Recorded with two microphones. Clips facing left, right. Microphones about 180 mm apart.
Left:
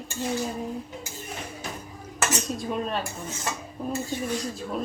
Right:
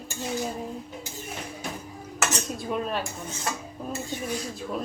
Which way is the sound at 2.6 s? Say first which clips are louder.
Even; centre (ahead or behind).